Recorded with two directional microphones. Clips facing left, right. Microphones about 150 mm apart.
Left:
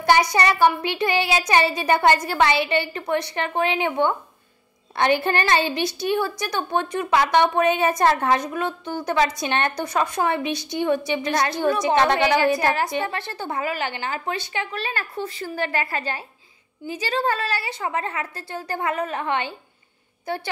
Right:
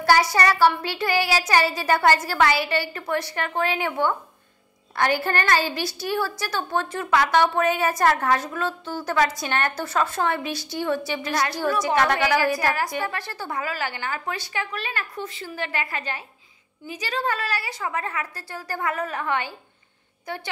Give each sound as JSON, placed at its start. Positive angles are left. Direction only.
{"t": 0.0, "sound": "a woman's voice", "side_deg": 20}